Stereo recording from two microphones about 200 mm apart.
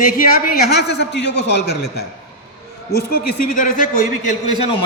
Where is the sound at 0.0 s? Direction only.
45° left (ahead or behind).